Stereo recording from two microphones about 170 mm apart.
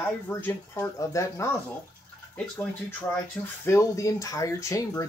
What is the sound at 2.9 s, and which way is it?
Speech, 15° left (ahead or behind).